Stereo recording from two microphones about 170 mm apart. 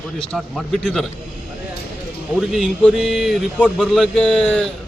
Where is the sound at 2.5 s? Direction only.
Centre (ahead or behind).